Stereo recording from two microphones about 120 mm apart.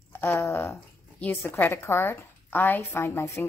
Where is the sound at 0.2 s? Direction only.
20° left (ahead or behind).